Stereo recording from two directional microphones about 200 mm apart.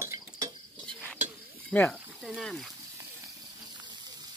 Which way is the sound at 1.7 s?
10° left (ahead or behind).